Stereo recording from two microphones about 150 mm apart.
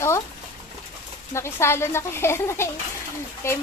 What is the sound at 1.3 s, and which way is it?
Speech, 15° left (ahead or behind).